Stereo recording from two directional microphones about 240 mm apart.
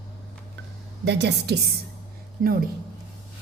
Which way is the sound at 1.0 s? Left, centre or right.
Right.